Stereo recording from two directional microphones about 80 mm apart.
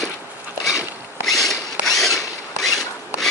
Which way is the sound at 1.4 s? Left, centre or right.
Centre.